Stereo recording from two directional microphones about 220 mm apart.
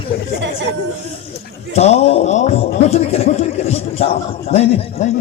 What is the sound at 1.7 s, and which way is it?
A man's voice, 30° left (ahead or behind).